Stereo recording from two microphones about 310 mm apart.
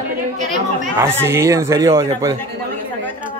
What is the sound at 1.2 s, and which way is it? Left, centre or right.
Speech, centre.